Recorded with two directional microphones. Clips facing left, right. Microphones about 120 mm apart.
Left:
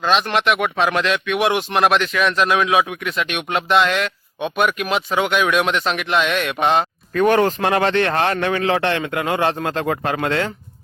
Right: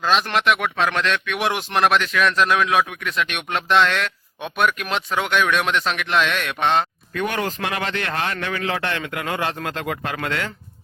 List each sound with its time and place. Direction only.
0.0 s speech: centre (ahead or behind)
7.1 s a man's voice: 40° left (ahead or behind)